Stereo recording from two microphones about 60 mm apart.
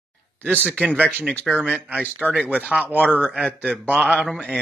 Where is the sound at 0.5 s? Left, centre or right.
Left.